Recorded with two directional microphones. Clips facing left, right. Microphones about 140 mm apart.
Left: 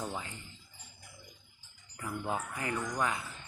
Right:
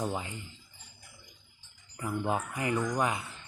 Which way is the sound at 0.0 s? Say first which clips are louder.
Right 5 dB; 20° right (ahead or behind).